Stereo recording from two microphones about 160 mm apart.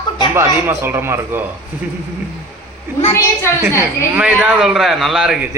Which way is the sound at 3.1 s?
15° left (ahead or behind).